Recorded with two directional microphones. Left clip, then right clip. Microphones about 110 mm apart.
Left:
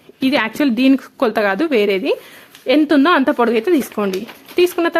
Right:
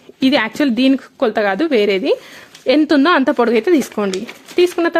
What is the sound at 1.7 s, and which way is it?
Speech, 15° right (ahead or behind).